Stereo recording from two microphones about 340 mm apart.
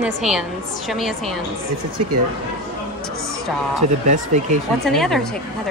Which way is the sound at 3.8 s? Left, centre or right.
Right.